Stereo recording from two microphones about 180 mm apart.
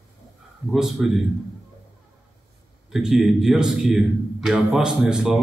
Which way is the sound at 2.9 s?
Centre (ahead or behind).